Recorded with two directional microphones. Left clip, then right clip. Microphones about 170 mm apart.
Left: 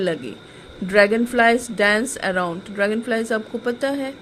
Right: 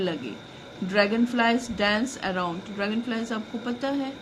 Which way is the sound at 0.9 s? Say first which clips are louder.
Left 7 dB; 45° left (ahead or behind).